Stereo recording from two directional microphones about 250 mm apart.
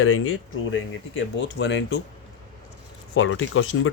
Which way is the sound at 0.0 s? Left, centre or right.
Left.